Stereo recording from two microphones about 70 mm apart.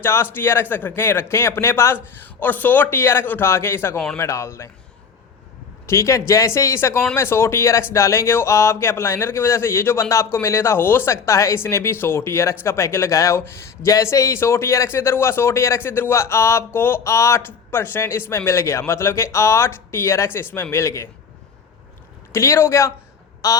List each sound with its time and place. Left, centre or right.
0.0 s speech: left
2.1 s a man's voice: left
5.8 s a man's voice: left
22.3 s a man's voice: left
23.4 s a sound: left